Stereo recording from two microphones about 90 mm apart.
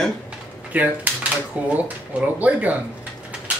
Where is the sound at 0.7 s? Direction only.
20° right (ahead or behind).